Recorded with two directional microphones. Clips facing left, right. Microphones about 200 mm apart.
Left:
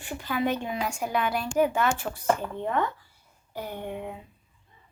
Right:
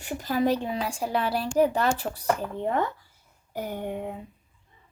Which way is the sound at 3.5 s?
45° right (ahead or behind).